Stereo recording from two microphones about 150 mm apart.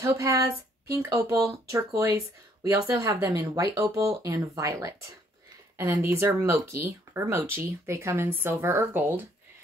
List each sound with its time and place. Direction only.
0.0 s speech: 20° right (ahead or behind)